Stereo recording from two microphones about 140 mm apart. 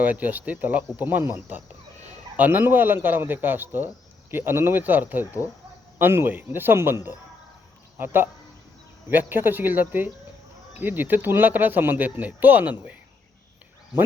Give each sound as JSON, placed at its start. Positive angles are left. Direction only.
{"t": 0.0, "sound": "speech", "side_deg": -10}